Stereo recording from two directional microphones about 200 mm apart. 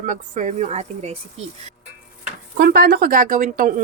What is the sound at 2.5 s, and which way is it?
Speech, 55° right (ahead or behind).